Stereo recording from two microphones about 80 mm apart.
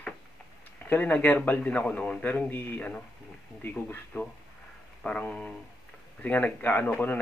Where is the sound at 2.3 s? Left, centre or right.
Left.